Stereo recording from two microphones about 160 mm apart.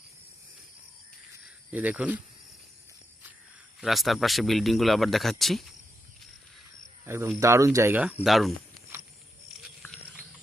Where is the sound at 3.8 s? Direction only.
Centre (ahead or behind).